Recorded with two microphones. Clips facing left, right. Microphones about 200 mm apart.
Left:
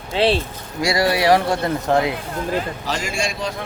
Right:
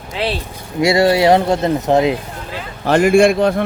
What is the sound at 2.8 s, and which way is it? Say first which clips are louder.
Speech: right 14 dB; 55° right (ahead or behind).